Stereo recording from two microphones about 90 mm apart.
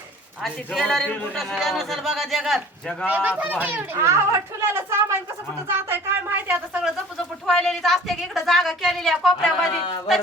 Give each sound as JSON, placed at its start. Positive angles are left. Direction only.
{"t": 0.4, "sound": "speech", "side_deg": 0}
{"t": 1.1, "sound": "a man's voice", "side_deg": 15}
{"t": 1.4, "sound": "speech", "side_deg": 5}
{"t": 3.1, "sound": "a child's voice", "side_deg": -15}
{"t": 4.0, "sound": "a woman's voice", "side_deg": -35}
{"t": 7.4, "sound": "speech", "side_deg": 5}